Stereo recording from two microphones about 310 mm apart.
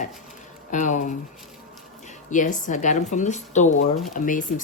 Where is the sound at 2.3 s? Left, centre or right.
Left.